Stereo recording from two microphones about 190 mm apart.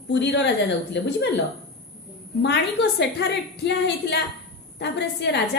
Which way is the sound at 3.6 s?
65° left (ahead or behind).